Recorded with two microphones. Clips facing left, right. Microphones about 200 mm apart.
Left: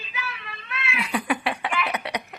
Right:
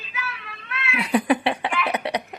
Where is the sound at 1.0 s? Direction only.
30° right (ahead or behind).